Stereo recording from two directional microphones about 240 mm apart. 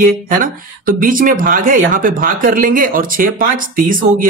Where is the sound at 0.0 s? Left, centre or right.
Right.